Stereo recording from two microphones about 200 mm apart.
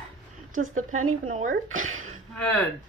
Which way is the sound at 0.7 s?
90° right.